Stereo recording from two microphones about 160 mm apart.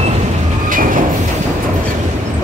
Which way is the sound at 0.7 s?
60° right (ahead or behind).